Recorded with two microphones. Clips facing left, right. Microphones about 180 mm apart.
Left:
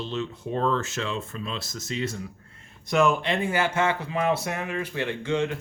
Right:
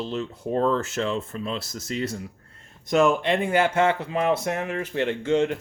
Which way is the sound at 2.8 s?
45° right (ahead or behind).